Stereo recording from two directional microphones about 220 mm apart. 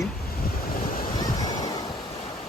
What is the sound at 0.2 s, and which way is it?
Waves, 40° left (ahead or behind).